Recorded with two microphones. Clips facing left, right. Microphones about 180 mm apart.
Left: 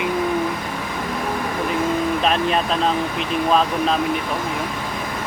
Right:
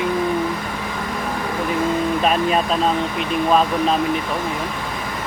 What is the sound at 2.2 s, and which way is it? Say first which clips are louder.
Speech: right 1 dB; 5° right (ahead or behind).